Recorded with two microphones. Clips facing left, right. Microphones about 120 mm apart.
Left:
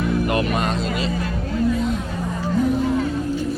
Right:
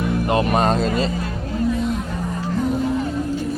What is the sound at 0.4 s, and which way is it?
Speech, 35° right (ahead or behind).